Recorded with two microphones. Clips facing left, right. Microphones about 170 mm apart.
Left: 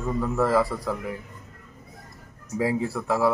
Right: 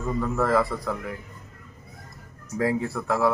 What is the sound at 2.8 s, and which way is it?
Speech, 10° left (ahead or behind).